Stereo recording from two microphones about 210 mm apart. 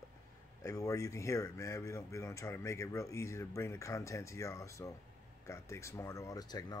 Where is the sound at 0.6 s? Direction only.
15° left (ahead or behind).